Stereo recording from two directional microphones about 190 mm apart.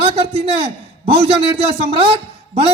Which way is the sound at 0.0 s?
30° right (ahead or behind).